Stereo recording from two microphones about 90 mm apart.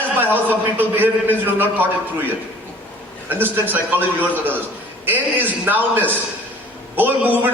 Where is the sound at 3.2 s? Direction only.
20° right (ahead or behind).